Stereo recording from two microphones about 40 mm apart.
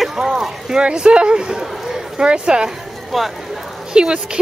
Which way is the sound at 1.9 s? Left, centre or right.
Centre.